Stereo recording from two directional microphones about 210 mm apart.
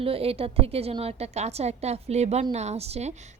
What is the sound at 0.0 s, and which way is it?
A woman's voice, 25° right (ahead or behind).